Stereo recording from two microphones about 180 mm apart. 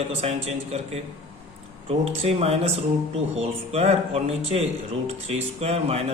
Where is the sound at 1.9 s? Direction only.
35° right (ahead or behind).